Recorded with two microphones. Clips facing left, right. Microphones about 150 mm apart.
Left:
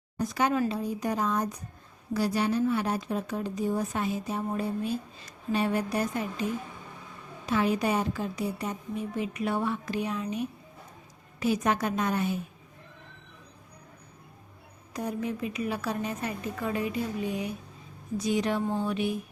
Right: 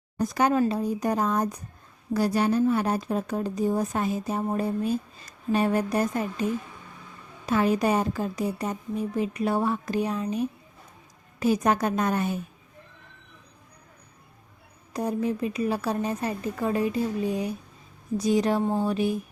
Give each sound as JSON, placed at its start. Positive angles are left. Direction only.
{"t": 0.3, "sound": "speech", "side_deg": -45}
{"t": 7.5, "sound": "a woman's voice", "side_deg": -45}
{"t": 14.9, "sound": "a woman's voice", "side_deg": -35}